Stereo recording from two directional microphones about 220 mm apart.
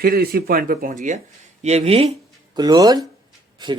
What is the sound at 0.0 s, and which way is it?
Speech, 40° right (ahead or behind).